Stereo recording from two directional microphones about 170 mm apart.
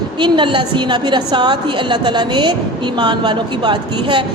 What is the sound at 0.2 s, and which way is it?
A woman's voice, 30° right (ahead or behind).